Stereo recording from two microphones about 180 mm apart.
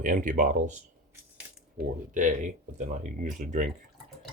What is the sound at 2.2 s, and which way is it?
Speech, 45° right (ahead or behind).